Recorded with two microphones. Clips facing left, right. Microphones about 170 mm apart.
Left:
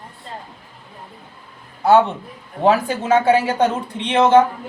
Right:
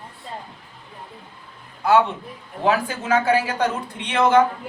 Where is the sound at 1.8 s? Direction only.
40° left (ahead or behind).